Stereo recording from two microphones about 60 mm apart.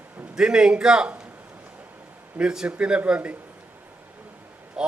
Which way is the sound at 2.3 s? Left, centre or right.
Centre.